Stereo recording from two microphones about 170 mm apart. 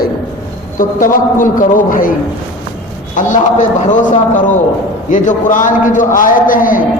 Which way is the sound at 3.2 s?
45° left (ahead or behind).